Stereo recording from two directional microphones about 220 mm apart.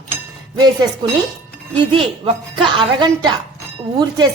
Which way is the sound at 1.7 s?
20° right (ahead or behind).